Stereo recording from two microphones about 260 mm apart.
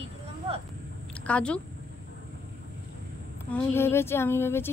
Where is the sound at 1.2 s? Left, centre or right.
Centre.